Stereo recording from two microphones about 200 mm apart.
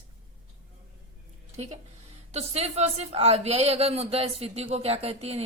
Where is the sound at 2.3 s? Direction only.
30° right (ahead or behind).